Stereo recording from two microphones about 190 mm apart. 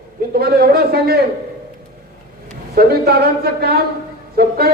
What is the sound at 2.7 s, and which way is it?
A man's voice, 55° right (ahead or behind).